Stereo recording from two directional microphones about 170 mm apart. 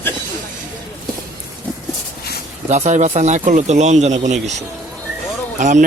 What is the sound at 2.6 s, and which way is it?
Speech, 40° right (ahead or behind).